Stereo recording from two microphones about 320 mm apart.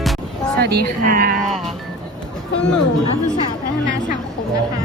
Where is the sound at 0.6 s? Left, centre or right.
Right.